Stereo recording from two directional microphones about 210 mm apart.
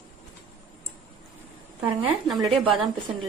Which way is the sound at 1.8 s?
5° right (ahead or behind).